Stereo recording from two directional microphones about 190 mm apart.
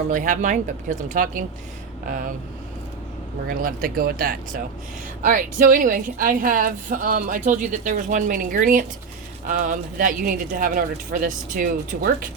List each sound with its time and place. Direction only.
0.1 s a woman's voice: 45° right (ahead or behind)
3.4 s a woman's voice: 50° right (ahead or behind)